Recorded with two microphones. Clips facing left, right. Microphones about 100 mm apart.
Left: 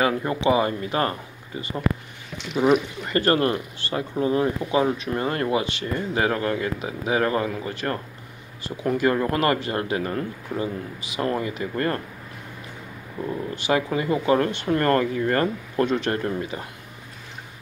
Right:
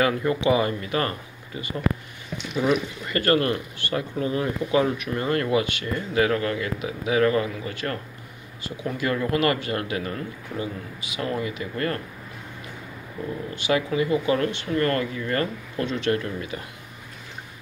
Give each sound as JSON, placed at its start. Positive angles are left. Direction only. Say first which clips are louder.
{"t": 0.0, "sound": "speech", "louder": "even", "side_deg": 25}
{"t": 3.1, "sound": "speech", "louder": "left 1 dB", "side_deg": 30}
{"t": 13.6, "sound": "speech", "louder": "right 1 dB", "side_deg": 40}